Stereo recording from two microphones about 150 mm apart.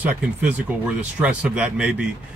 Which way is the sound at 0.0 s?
10° right (ahead or behind).